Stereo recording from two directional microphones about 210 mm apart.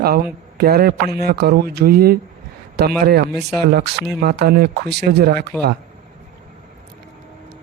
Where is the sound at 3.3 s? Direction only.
Centre (ahead or behind).